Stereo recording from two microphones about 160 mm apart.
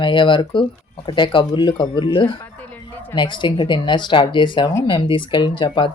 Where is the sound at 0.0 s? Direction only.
30° left (ahead or behind).